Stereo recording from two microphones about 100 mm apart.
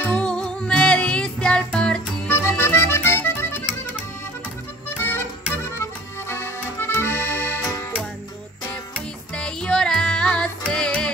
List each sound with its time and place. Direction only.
0.0 s music: 10° left (ahead or behind)
2.2 s accordion: 25° left (ahead or behind)
4.9 s music: 20° left (ahead or behind)
5.8 s accordion: 25° left (ahead or behind)
9.3 s music: 10° left (ahead or behind)